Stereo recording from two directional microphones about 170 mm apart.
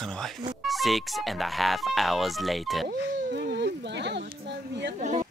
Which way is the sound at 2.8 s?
70° right (ahead or behind).